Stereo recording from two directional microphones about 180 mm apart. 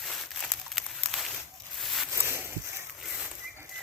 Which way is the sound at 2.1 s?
10° right (ahead or behind).